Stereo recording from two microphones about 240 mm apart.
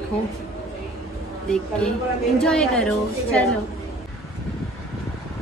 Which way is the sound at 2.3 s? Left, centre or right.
Centre.